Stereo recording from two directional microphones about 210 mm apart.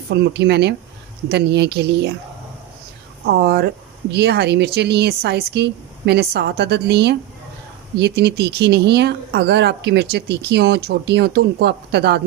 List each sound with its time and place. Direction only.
0.1 s speech: 55° right (ahead or behind)
3.2 s speech: 50° right (ahead or behind)